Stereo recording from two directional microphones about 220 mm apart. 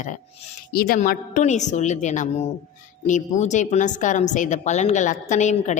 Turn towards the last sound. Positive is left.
turn(degrees=35)  # may be behind; listen again after turning